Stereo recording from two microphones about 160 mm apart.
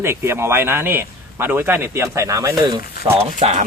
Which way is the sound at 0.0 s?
15° right (ahead or behind).